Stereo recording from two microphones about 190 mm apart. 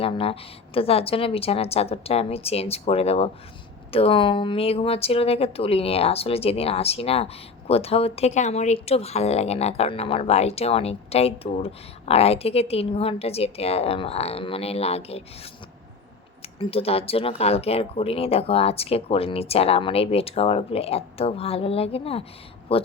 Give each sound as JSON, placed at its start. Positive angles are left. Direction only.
{"t": 0.0, "sound": "speech", "side_deg": 30}
{"t": 16.4, "sound": "speech", "side_deg": 30}